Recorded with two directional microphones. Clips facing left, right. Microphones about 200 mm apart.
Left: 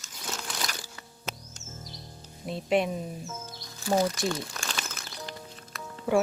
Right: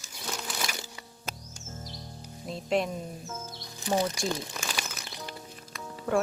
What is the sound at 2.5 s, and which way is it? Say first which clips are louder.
Speech: left 2 dB; 5° left (ahead or behind).